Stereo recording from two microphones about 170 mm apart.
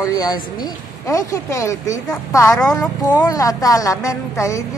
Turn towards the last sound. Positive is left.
turn(degrees=20)  # may be behind; listen again after turning